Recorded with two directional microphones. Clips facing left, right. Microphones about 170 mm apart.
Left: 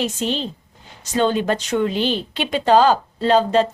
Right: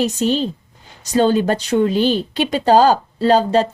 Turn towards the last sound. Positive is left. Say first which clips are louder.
# right 2 dB
turn(degrees=-35)  # may be behind; listen again after turning